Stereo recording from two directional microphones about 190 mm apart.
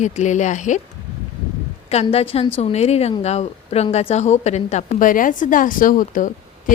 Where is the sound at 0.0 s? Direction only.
40° left (ahead or behind).